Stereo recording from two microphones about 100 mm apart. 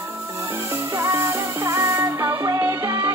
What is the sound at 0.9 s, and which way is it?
Music, 30° right (ahead or behind).